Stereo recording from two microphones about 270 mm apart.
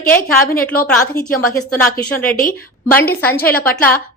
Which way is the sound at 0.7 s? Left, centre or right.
Left.